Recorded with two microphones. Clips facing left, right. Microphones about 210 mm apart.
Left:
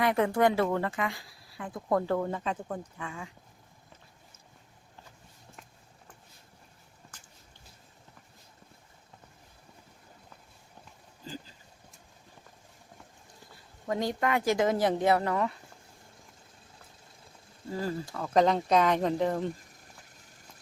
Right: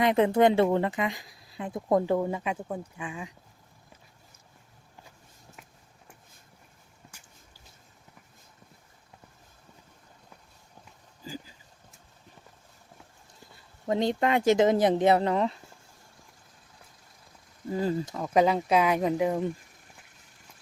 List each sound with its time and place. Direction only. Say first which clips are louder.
0.0 s speech: right 4 dB; 20° right (ahead or behind)
11.2 s a sound: right 2 dB; 10° right (ahead or behind)
13.8 s speech: right 4 dB; 25° right (ahead or behind)
17.7 s speech: right 5 dB; 20° right (ahead or behind)
18.3 s speech: right 1 dB; 5° right (ahead or behind)